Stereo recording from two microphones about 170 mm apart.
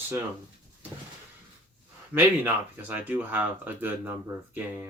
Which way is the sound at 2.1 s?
10° right (ahead or behind).